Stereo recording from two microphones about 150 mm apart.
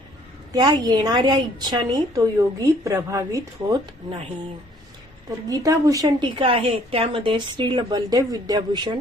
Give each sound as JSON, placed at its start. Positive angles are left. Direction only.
{"t": 0.5, "sound": "a woman's voice", "side_deg": -30}
{"t": 5.5, "sound": "a woman's voice", "side_deg": -20}